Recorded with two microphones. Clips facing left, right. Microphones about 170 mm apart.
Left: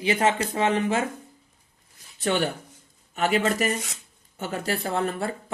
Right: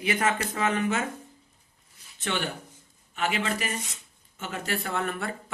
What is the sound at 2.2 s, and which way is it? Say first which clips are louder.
Speech: left 6 dB; 40° left (ahead or behind).